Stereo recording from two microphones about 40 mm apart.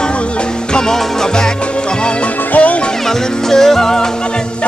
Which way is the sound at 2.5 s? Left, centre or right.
Left.